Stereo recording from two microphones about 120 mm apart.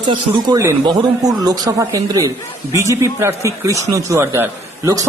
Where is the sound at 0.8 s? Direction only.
35° right (ahead or behind).